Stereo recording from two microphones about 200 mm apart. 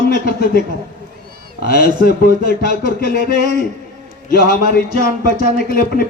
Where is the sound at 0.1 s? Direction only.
50° left (ahead or behind).